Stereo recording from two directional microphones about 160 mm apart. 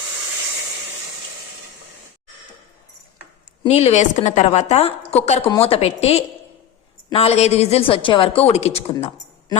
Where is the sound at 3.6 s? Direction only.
40° left (ahead or behind).